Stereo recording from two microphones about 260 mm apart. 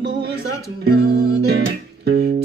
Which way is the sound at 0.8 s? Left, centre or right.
Right.